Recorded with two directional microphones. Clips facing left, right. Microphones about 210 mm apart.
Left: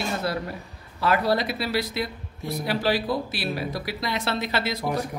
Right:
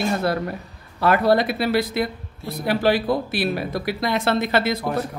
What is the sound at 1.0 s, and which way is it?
Speech, 55° right (ahead or behind).